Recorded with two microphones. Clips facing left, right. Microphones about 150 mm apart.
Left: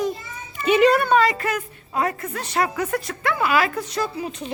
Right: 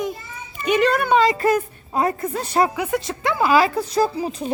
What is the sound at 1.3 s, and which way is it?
Speech, 35° right (ahead or behind).